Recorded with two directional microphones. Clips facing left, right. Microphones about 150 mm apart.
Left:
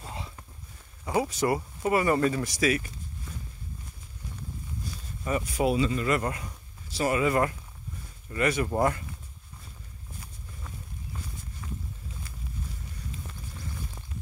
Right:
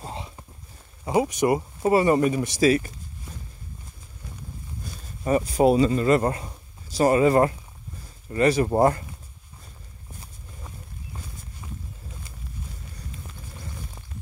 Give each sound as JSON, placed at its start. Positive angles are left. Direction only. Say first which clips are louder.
{"t": 0.1, "sound": "walk", "louder": "right 4 dB", "side_deg": -20}
{"t": 1.0, "sound": "speech", "louder": "right 5 dB", "side_deg": -20}
{"t": 5.2, "sound": "speech", "louder": "right 7 dB", "side_deg": -35}